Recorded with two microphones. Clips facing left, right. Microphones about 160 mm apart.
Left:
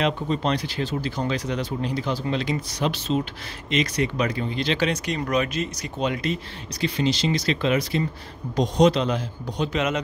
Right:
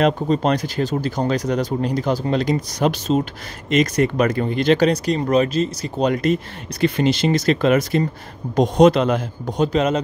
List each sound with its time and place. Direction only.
0.0 s speech: 45° right (ahead or behind)
9.7 s speech: 35° right (ahead or behind)